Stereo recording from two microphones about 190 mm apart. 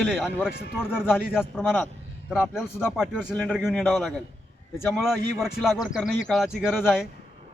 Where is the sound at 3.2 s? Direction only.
Centre (ahead or behind).